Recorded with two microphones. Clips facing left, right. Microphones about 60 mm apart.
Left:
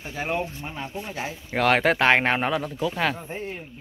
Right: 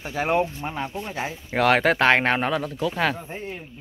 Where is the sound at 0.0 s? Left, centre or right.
Right.